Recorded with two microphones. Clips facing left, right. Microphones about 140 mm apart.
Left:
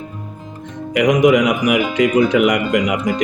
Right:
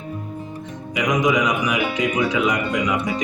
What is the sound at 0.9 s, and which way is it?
Speech, 65° left (ahead or behind).